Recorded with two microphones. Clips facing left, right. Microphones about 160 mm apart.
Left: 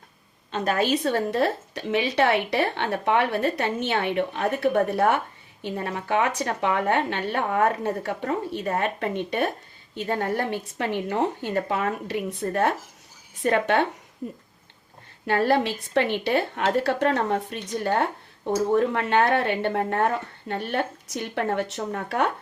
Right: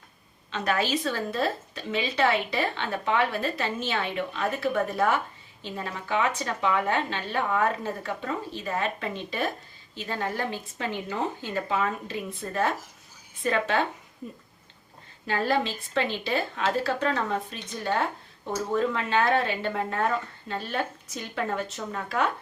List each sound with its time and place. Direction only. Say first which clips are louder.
0.5 s a woman's voice: left 3 dB; 45° left (ahead or behind)
1.0 s a woman's voice: left 5 dB; 65° left (ahead or behind)
15.3 s a woman's voice: left 4 dB; 65° left (ahead or behind)
17.8 s a woman's voice: left 3 dB; 45° left (ahead or behind)
18.8 s a woman's voice: left 4 dB; 60° left (ahead or behind)